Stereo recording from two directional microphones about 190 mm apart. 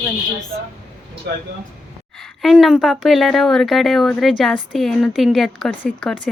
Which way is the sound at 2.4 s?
Centre (ahead or behind).